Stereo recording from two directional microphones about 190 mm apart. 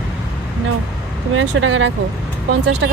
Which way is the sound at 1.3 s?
90° right.